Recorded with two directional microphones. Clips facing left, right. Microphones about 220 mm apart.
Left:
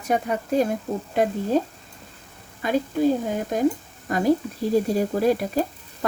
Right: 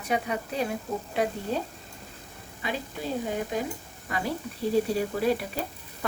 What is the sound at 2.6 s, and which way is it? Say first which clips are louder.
Speech: left 11 dB; 45° left (ahead or behind).